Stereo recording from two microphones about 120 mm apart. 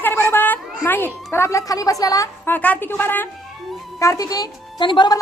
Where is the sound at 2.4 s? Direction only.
15° left (ahead or behind).